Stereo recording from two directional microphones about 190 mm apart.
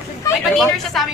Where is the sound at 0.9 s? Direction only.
Centre (ahead or behind).